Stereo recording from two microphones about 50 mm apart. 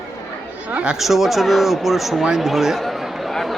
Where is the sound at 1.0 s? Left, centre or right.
Centre.